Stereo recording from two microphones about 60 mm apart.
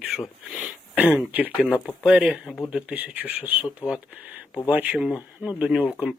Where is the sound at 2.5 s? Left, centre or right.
Centre.